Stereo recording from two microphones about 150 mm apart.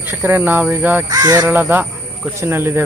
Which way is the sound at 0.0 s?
15° right (ahead or behind).